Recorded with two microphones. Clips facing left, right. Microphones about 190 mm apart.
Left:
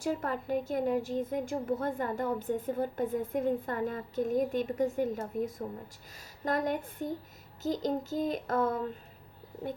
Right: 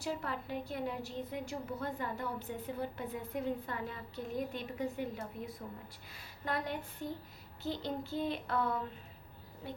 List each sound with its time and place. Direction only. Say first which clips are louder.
0.0 s a woman's voice: left 6 dB; 45° left (ahead or behind)